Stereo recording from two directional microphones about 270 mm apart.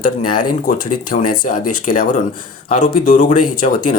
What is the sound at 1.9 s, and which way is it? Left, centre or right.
Speech, left.